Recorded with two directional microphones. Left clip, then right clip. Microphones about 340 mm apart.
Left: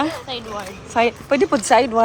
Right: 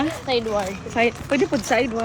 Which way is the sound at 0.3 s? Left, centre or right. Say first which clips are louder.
Right 7 dB; centre.